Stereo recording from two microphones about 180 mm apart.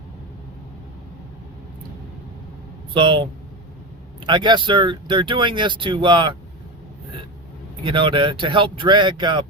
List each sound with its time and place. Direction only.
2.9 s speech: 25° right (ahead or behind)
4.3 s speech: 25° right (ahead or behind)
7.9 s speech: 25° right (ahead or behind)